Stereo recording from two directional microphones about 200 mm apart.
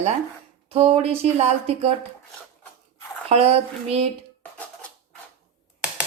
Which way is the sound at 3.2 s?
30° right (ahead or behind).